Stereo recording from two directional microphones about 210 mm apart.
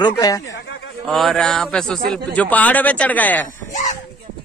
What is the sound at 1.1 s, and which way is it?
Speech, centre (ahead or behind).